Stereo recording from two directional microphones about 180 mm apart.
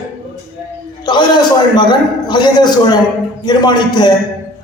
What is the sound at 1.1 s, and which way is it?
A man's voice, 25° left (ahead or behind).